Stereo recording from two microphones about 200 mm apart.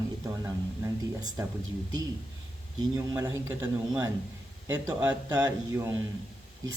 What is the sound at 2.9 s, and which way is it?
A man's voice, 20° right (ahead or behind).